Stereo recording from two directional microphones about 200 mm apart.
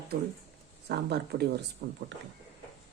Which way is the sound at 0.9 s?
55° right (ahead or behind).